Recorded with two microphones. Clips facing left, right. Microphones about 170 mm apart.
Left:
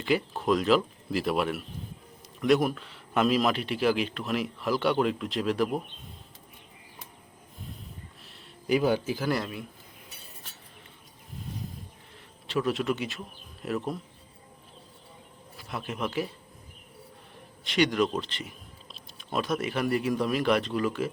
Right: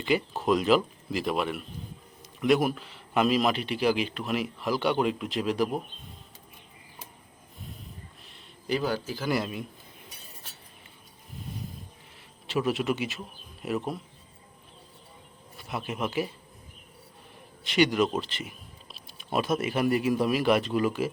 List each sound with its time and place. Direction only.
0.0 s speech: centre (ahead or behind)
8.3 s a sound: 5° left (ahead or behind)
8.8 s speech: 20° left (ahead or behind)
9.4 s speech: 20° right (ahead or behind)
12.5 s speech: 5° right (ahead or behind)
15.7 s speech: 5° right (ahead or behind)
17.6 s a sound: centre (ahead or behind)
19.6 s speech: 5° right (ahead or behind)